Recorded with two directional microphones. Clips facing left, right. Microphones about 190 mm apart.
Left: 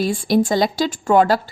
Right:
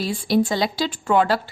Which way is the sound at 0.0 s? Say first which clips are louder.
Left 3 dB; 50° left (ahead or behind).